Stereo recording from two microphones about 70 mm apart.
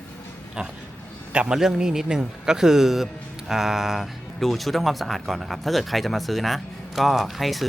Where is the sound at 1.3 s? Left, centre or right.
Centre.